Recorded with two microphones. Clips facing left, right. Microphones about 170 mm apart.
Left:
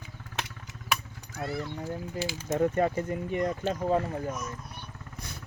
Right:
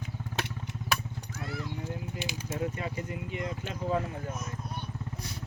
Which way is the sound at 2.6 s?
50° left (ahead or behind).